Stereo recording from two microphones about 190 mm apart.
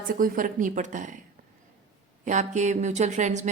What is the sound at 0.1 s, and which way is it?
A woman's voice, 45° right (ahead or behind).